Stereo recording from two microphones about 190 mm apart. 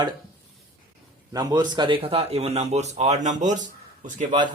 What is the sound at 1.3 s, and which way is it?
Speech, 20° right (ahead or behind).